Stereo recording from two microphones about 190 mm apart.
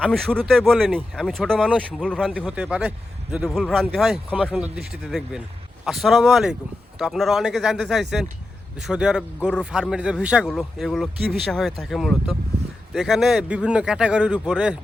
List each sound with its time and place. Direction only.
0.0 s a man's voice: centre (ahead or behind)